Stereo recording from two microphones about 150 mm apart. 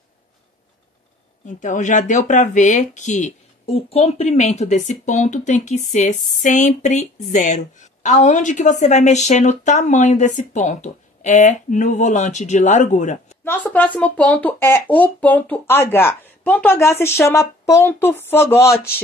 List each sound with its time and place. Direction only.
1.4 s speech: 55° left (ahead or behind)
13.4 s speech: 15° left (ahead or behind)